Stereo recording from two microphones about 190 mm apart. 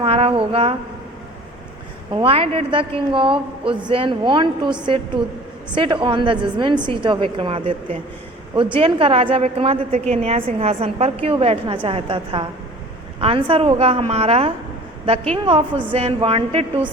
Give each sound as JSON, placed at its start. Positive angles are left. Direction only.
{"t": 0.0, "sound": "a sound", "side_deg": -30}
{"t": 2.1, "sound": "a woman's voice", "side_deg": -30}
{"t": 8.8, "sound": "a woman's voice", "side_deg": -30}